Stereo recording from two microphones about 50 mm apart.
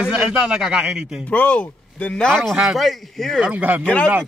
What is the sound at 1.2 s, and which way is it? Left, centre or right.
Speech, left.